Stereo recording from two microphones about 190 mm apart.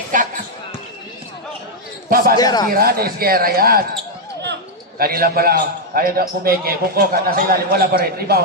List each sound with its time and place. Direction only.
0.1 s a man's voice: 45° right (ahead or behind)
2.0 s speech: 50° right (ahead or behind)
2.3 s speech: 20° left (ahead or behind)
2.7 s a man's voice: 50° right (ahead or behind)
4.9 s a man's voice: 50° right (ahead or behind)